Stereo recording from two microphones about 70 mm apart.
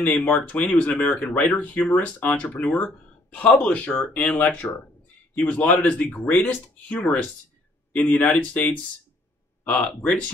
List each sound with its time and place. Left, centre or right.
0.0 s speech: left